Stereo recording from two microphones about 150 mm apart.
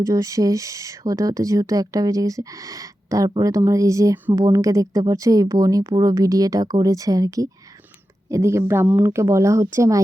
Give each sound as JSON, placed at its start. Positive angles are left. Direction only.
{"t": 0.0, "sound": "speech", "side_deg": -20}